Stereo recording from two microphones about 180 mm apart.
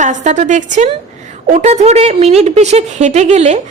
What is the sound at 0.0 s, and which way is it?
A woman's voice, 40° right (ahead or behind).